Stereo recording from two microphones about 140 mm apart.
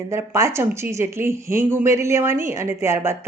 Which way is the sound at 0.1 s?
20° right (ahead or behind).